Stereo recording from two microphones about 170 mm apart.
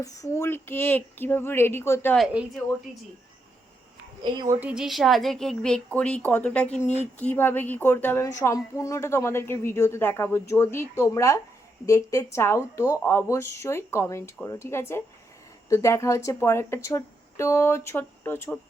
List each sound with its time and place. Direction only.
0.0 s speech: 20° left (ahead or behind)
2.1 s a woman's voice: centre (ahead or behind)
4.2 s speech: 25° right (ahead or behind)
4.6 s a woman's voice: 5° right (ahead or behind); by 18.5 s 15° left (ahead or behind)